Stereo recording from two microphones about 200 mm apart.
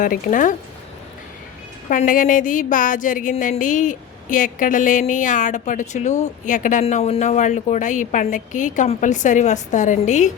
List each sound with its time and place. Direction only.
0.0 s a woman's voice: 40° left (ahead or behind)
1.9 s a woman's voice: 40° left (ahead or behind)